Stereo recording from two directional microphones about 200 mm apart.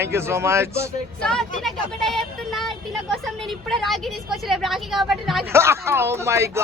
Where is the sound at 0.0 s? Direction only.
15° right (ahead or behind).